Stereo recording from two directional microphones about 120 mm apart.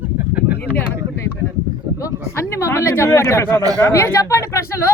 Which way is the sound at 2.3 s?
20° left (ahead or behind).